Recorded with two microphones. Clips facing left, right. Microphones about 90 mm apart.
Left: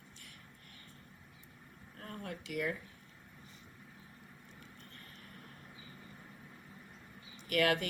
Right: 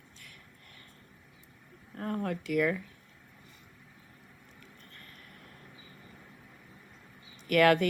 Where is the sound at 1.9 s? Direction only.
45° right (ahead or behind).